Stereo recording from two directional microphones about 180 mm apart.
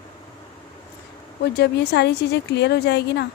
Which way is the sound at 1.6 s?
65° left (ahead or behind).